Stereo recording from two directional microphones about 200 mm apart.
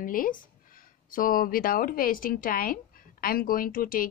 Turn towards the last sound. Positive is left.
turn(degrees=45)  # may be behind; listen again after turning